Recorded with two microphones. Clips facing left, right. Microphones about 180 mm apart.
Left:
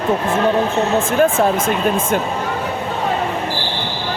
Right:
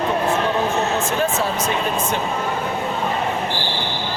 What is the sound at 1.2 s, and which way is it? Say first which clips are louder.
Speech: left 6 dB; 50° left (ahead or behind).